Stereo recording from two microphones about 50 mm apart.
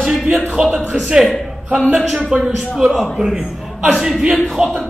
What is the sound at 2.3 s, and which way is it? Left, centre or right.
A man's voice, centre.